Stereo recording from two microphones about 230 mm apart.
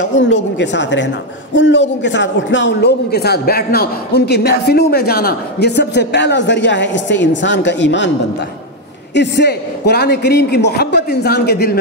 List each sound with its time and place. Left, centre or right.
0.0 s a woman's voice: left
9.1 s a woman's voice: left